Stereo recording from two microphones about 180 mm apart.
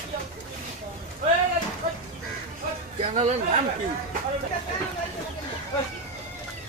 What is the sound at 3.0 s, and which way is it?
Speech, 35° right (ahead or behind).